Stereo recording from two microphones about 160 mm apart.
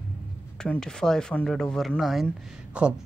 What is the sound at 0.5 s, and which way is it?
Speech, 5° left (ahead or behind).